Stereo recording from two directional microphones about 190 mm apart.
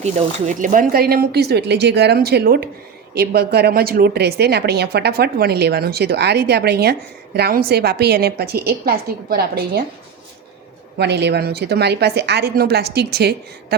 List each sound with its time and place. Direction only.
0.0 s a woman's voice: 40° right (ahead or behind)
10.9 s a woman's voice: 60° right (ahead or behind)